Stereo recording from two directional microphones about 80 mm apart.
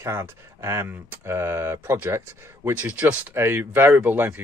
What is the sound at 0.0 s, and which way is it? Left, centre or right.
Speech, right.